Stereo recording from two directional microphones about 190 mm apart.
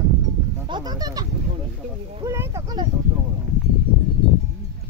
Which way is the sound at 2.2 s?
15° right (ahead or behind).